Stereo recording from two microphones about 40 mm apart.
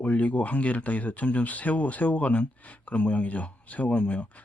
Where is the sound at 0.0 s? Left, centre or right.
Left.